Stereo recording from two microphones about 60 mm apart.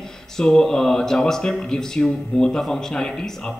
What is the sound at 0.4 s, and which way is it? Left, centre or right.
Speech, centre.